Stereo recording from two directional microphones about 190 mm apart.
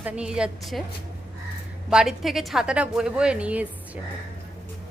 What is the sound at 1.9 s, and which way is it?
A woman's voice, 5° right (ahead or behind).